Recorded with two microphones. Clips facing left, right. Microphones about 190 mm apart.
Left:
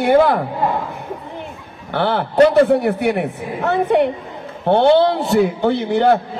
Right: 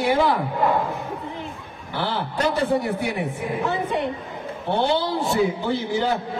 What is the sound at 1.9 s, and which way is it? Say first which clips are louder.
A man's voice: left 10 dB; 65° left (ahead or behind).